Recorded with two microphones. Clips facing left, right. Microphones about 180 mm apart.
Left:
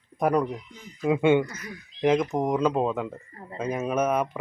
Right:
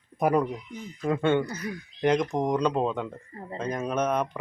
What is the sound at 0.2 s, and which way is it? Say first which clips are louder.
Speech: even; 5° right (ahead or behind).